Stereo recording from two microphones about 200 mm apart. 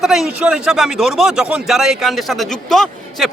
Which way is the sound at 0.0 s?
Centre (ahead or behind).